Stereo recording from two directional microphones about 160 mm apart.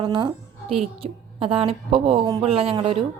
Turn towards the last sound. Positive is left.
turn(degrees=-35)  # may be behind; listen again after turning